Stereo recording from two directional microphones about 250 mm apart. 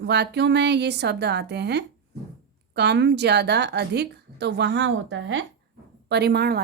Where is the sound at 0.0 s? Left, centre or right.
Right.